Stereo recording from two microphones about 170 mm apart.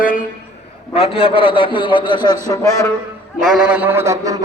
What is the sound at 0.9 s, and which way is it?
A man's voice, 35° left (ahead or behind).